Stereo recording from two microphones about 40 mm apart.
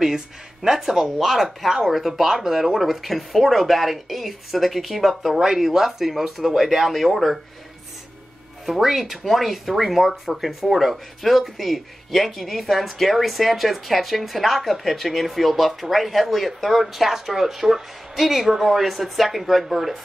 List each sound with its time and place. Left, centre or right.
0.0 s speech: centre
5.4 s speech: centre
8.6 s speech: centre